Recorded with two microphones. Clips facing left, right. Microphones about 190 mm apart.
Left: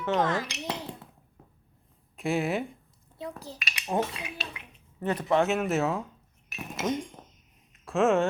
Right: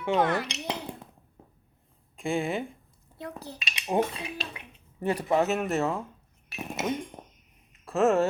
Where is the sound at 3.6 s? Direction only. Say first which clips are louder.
Even; 25° right (ahead or behind).